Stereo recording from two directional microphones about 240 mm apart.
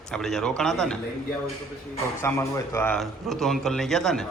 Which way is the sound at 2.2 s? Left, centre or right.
Centre.